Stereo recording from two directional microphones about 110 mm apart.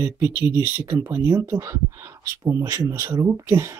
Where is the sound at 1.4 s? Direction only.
30° right (ahead or behind).